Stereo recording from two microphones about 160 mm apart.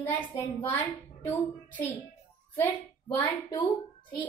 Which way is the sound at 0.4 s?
15° left (ahead or behind).